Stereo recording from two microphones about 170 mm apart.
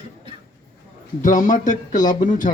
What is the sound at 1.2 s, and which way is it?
Speech, 45° left (ahead or behind).